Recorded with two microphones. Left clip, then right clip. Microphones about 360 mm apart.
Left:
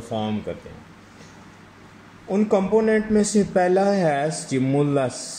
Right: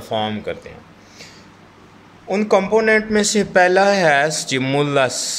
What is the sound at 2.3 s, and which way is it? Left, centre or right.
A man's voice, right.